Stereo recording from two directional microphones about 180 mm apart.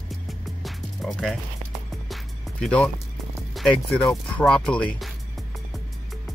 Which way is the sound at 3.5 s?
Centre (ahead or behind).